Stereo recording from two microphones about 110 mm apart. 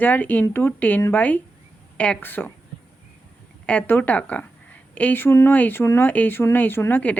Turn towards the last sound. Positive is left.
turn(degrees=15)  # may be behind; listen again after turning